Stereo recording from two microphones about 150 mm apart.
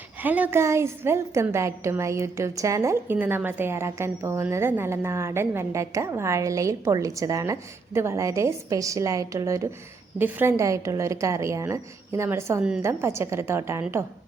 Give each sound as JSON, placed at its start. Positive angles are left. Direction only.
{"t": 0.2, "sound": "a woman's voice", "side_deg": -10}